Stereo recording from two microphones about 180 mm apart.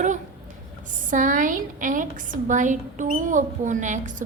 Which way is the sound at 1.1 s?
45° right (ahead or behind).